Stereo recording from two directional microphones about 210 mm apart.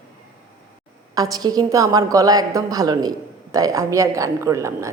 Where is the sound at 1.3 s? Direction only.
20° right (ahead or behind).